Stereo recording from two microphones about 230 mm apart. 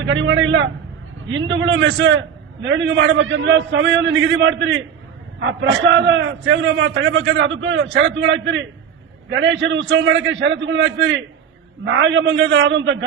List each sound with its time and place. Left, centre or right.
0.0 s a man's voice: right